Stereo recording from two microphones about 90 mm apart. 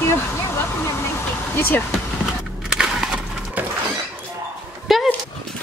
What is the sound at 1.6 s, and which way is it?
Speech, 20° left (ahead or behind).